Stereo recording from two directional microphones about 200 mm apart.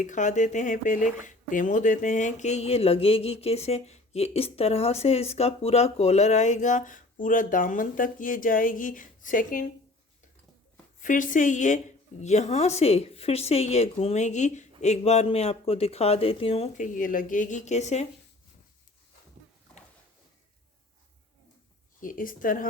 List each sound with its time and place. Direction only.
0.0 s speech: 40° left (ahead or behind)
11.0 s speech: 40° left (ahead or behind)
22.0 s a woman's voice: 45° left (ahead or behind)